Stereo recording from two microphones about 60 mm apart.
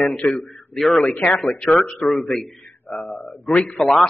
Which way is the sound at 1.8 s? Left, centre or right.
Left.